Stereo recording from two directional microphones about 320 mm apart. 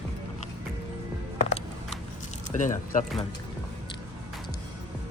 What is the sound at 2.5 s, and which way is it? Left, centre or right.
Speech, left.